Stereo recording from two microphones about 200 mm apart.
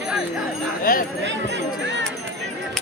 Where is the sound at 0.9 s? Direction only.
45° left (ahead or behind).